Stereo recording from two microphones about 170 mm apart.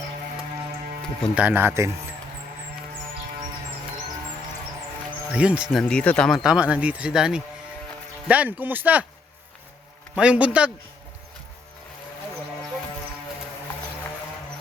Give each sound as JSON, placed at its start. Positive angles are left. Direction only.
{"t": 1.4, "sound": "speech", "side_deg": -10}
{"t": 5.3, "sound": "speech", "side_deg": -5}
{"t": 5.8, "sound": "speech", "side_deg": 5}
{"t": 10.2, "sound": "speech", "side_deg": -5}